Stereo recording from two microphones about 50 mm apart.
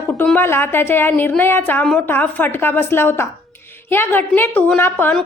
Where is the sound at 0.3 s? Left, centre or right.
Left.